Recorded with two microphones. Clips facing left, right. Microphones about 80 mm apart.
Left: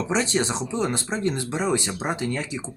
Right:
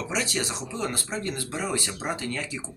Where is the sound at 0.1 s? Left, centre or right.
Left.